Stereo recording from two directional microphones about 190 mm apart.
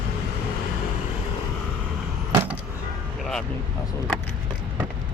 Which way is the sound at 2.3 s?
10° right (ahead or behind).